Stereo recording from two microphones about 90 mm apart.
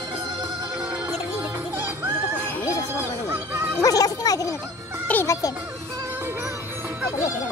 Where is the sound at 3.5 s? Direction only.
25° right (ahead or behind).